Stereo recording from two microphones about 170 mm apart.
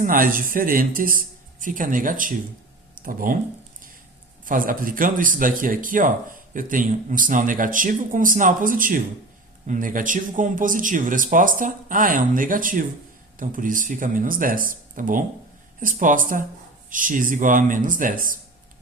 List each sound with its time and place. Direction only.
0.0 s speech: 55° right (ahead or behind)
4.4 s speech: 55° right (ahead or behind)